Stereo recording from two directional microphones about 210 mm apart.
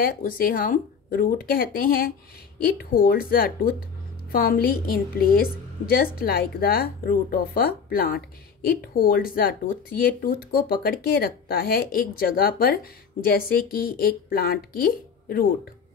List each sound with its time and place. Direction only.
0.0 s a woman's voice: 45° left (ahead or behind)